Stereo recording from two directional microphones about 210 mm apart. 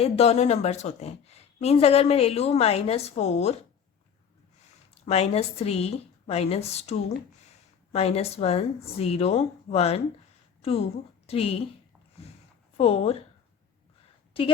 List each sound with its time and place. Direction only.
0.0 s a woman's voice: 30° left (ahead or behind)
4.9 s a woman's voice: 30° left (ahead or behind)
12.7 s a woman's voice: 30° left (ahead or behind)